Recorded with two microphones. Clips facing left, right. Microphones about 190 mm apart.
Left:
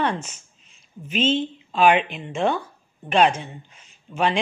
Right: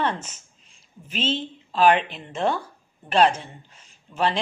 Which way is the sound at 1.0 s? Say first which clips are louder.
Left 5 dB; 30° right (ahead or behind).